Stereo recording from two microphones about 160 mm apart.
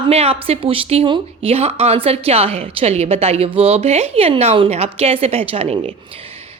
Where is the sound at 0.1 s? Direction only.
40° right (ahead or behind).